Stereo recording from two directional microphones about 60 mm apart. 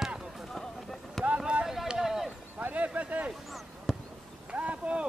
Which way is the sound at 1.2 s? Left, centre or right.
Centre.